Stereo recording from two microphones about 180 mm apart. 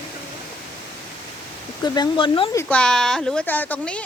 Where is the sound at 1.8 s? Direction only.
25° left (ahead or behind).